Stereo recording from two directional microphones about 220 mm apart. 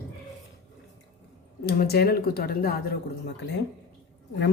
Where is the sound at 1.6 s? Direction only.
45° left (ahead or behind).